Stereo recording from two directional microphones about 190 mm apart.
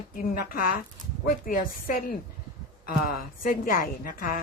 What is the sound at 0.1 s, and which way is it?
A woman's voice, 50° left (ahead or behind).